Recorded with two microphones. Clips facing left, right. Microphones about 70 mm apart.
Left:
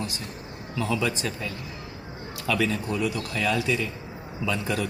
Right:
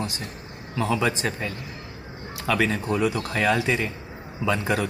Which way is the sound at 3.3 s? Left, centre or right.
Right.